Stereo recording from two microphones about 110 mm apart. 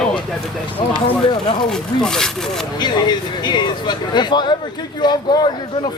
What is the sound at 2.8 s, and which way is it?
Speech, 40° left (ahead or behind).